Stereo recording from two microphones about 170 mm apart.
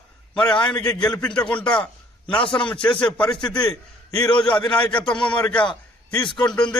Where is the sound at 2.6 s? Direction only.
5° left (ahead or behind).